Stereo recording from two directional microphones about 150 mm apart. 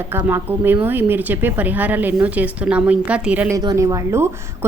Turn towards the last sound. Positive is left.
turn(degrees=-20)  # may be behind; listen again after turning